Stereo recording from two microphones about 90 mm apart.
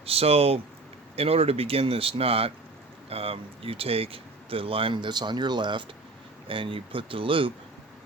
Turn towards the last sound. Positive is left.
turn(degrees=-75)  # may be behind; listen again after turning